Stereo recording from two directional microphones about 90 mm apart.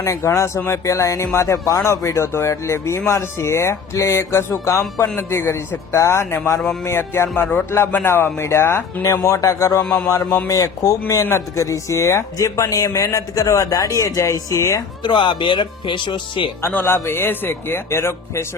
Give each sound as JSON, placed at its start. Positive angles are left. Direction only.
{"t": 0.0, "sound": "speech", "side_deg": 35}
{"t": 9.8, "sound": "a sound", "side_deg": 5}
{"t": 10.1, "sound": "speech", "side_deg": 35}
{"t": 15.0, "sound": "speech", "side_deg": 65}
{"t": 16.6, "sound": "speech", "side_deg": 25}